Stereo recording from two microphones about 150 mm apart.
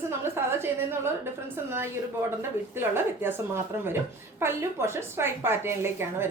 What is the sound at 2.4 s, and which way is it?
Speech, 15° right (ahead or behind).